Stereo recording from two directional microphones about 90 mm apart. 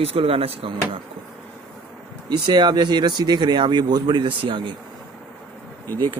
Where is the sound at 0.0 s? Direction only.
90° right.